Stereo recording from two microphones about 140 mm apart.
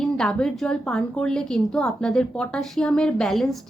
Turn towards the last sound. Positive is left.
turn(degrees=0)  # may be behind; listen again after turning